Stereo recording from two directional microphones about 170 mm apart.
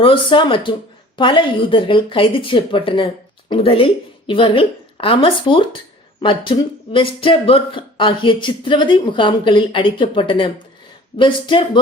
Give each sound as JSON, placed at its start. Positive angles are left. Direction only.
{"t": 0.0, "sound": "a woman's voice", "side_deg": 30}